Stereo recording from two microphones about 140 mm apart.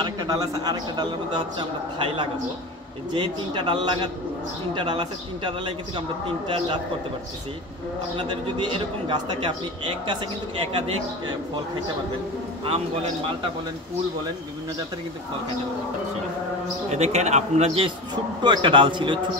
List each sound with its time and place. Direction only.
0.0 s a man's voice: 30° right (ahead or behind)
3.2 s a man's voice: 35° right (ahead or behind)
8.2 s a man's voice: 35° right (ahead or behind)
12.6 s a man's voice: 45° right (ahead or behind)
16.9 s a man's voice: 55° right (ahead or behind); by 19.1 s 35° right (ahead or behind)